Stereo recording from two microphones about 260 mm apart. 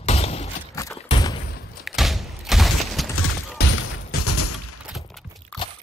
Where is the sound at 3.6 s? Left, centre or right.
Left.